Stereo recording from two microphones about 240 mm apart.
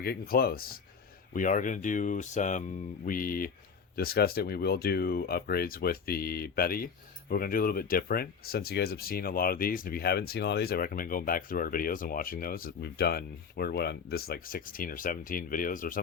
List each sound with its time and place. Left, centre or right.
0.0 s speech: left